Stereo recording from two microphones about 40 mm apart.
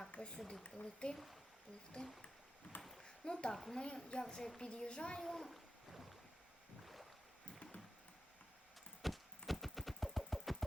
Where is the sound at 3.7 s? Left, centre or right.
Left.